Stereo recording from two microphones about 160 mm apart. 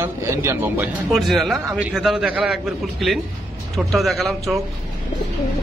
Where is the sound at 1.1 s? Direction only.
Centre (ahead or behind).